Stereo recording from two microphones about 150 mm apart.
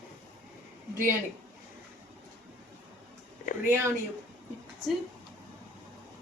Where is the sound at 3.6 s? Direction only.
15° right (ahead or behind).